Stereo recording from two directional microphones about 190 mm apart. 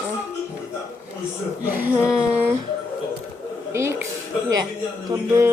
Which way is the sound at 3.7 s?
15° right (ahead or behind).